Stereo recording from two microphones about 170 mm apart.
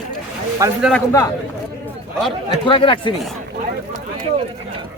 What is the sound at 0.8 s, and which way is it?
Speech, centre (ahead or behind).